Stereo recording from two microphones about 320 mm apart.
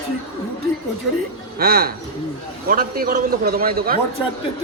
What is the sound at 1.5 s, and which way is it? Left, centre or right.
A man's voice, right.